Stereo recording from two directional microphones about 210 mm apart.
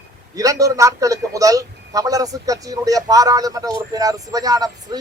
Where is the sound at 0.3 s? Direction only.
15° right (ahead or behind).